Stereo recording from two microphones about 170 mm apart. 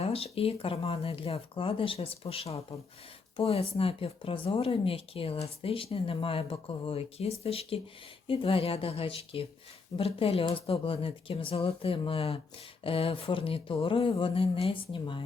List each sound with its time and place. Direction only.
0.0 s speech: 35° left (ahead or behind)